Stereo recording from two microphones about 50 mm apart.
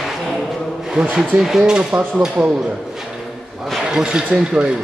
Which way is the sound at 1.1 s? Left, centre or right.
Centre.